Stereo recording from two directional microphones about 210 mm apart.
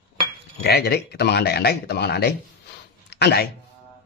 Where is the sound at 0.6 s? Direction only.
50° left (ahead or behind).